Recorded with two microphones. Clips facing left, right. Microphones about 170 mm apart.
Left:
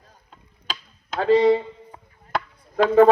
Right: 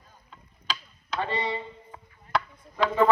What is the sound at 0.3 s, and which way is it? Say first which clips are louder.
Chop: even; 45° left (ahead or behind).